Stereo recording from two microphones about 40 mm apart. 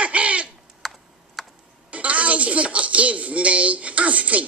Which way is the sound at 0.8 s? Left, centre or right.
Centre.